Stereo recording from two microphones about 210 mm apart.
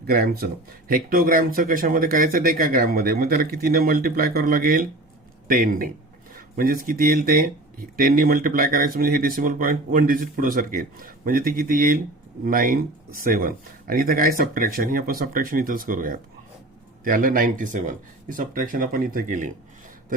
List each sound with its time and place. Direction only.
0.0 s speech: 45° right (ahead or behind)